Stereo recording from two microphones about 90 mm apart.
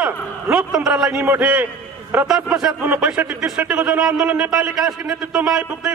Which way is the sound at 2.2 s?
5° right (ahead or behind).